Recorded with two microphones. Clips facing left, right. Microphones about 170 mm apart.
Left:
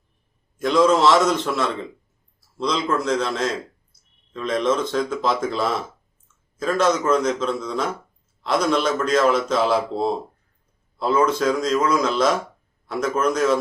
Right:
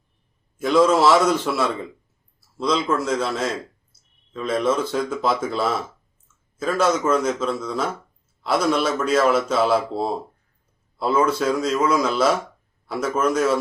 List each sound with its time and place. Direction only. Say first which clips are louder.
0.6 s a man's voice: even; 5° right (ahead or behind)